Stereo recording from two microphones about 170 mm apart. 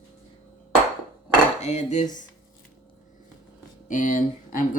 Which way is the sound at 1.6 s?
45° left (ahead or behind).